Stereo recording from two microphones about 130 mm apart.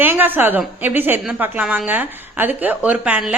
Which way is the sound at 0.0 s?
15° right (ahead or behind).